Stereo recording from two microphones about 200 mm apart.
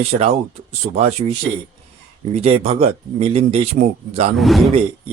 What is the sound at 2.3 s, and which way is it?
Speech, 30° right (ahead or behind).